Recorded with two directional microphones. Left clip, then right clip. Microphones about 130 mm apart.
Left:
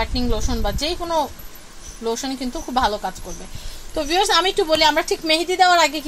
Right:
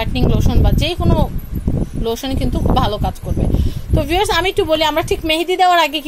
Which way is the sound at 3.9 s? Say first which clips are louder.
Right 2 dB; 45° right (ahead or behind).